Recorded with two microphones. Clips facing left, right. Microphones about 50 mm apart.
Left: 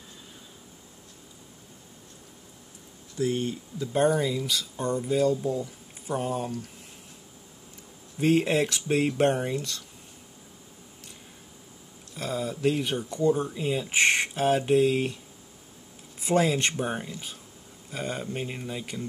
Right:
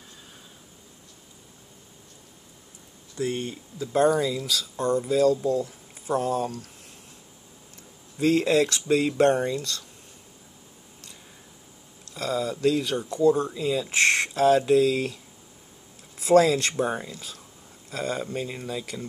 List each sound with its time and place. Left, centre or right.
3.2 s speech: right
3.9 s speech: right
6.1 s speech: right
8.2 s speech: right
12.1 s speech: right
13.2 s speech: right
16.2 s speech: right
17.9 s speech: right
18.3 s speech: left
18.9 s speech: right